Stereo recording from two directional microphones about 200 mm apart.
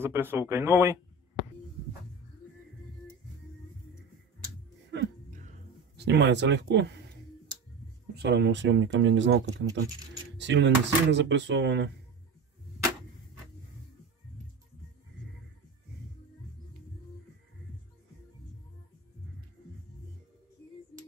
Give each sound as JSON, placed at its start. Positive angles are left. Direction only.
{"t": 0.0, "sound": "speech", "side_deg": -10}
{"t": 5.9, "sound": "speech", "side_deg": -60}
{"t": 8.2, "sound": "speech", "side_deg": -60}